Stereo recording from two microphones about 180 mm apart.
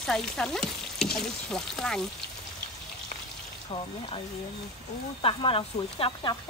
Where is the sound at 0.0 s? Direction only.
Centre (ahead or behind).